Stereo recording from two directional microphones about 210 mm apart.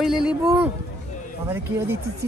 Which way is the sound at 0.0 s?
5° right (ahead or behind).